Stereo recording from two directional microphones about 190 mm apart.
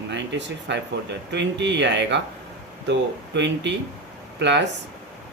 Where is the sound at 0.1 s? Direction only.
65° right (ahead or behind).